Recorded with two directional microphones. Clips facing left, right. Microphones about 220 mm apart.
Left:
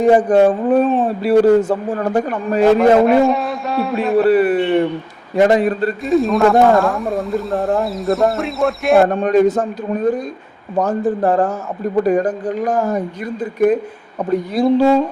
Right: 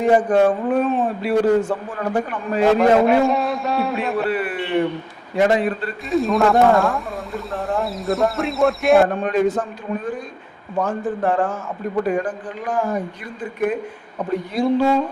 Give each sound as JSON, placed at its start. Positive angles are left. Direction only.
{"t": 0.1, "sound": "speech", "side_deg": 35}
{"t": 2.6, "sound": "a man's voice", "side_deg": 0}
{"t": 4.2, "sound": "speech", "side_deg": 40}
{"t": 6.1, "sound": "a man's voice", "side_deg": 0}
{"t": 9.2, "sound": "speech", "side_deg": 40}